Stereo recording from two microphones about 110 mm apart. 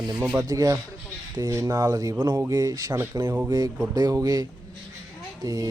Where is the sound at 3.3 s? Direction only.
20° right (ahead or behind).